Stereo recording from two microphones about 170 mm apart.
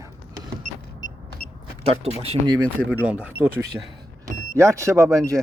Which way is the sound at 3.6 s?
20° right (ahead or behind).